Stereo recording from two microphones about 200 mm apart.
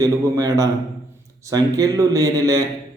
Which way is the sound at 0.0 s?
15° right (ahead or behind).